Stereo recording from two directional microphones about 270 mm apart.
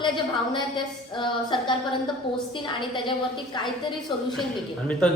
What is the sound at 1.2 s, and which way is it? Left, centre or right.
Speech, centre.